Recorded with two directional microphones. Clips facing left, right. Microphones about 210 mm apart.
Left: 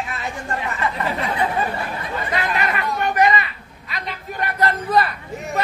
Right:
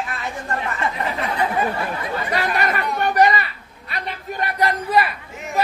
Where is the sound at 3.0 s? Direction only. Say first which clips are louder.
Right 1 dB; 35° right (ahead or behind).